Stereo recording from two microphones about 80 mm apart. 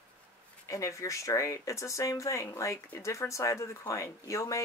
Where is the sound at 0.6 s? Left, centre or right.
Left.